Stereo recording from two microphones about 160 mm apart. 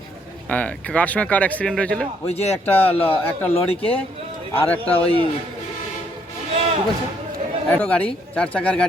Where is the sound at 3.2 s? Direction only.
15° left (ahead or behind).